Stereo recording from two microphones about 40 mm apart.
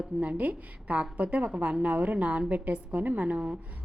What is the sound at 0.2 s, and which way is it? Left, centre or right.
A woman's voice, right.